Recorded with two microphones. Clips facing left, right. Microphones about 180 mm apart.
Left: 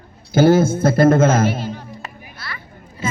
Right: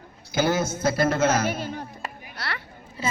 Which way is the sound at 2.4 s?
70° right (ahead or behind).